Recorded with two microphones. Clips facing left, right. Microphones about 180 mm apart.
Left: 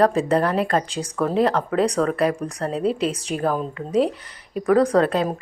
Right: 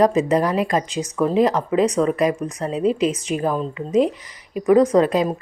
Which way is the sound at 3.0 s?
35° left (ahead or behind).